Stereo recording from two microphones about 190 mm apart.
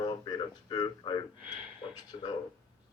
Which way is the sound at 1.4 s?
10° right (ahead or behind).